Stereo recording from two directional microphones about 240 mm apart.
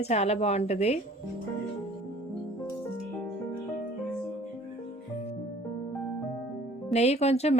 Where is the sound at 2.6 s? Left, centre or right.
Centre.